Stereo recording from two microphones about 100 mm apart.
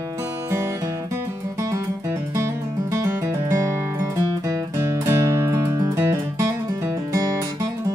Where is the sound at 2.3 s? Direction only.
30° right (ahead or behind).